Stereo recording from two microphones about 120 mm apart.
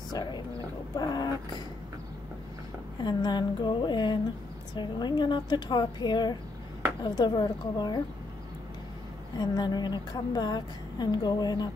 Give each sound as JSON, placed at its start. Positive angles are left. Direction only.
{"t": 0.9, "sound": "dog", "side_deg": 35}
{"t": 3.0, "sound": "a woman's voice", "side_deg": 40}
{"t": 9.4, "sound": "a woman's voice", "side_deg": 35}